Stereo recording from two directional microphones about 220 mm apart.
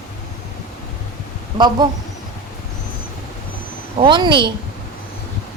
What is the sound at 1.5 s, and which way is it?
Speech, 20° right (ahead or behind).